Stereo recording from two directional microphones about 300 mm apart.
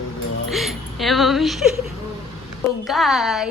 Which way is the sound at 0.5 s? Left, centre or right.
Centre.